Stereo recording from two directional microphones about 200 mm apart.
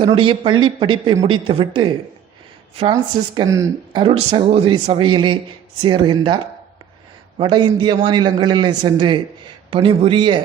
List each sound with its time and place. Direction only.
0.0 s a man's voice: 25° right (ahead or behind)
4.0 s a man's voice: 25° right (ahead or behind)